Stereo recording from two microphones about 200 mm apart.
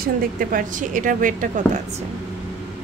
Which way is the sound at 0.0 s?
45° right (ahead or behind).